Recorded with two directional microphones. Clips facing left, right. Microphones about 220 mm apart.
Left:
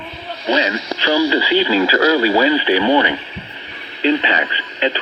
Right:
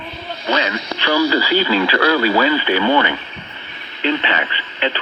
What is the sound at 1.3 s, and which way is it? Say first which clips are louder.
Speech: left 1 dB; 25° left (ahead or behind).